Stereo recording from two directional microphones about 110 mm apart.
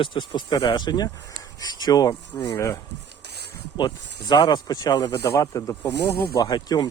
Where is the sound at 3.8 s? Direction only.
40° left (ahead or behind).